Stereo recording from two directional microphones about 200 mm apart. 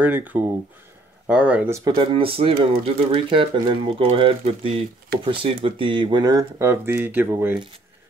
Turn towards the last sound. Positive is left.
turn(degrees=-10)  # may be behind; listen again after turning